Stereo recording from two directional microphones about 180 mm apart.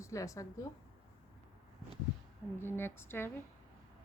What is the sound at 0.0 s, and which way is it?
Speech, 15° left (ahead or behind).